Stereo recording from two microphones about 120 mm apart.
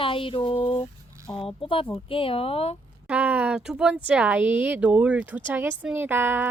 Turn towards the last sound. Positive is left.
turn(degrees=-20)  # may be behind; listen again after turning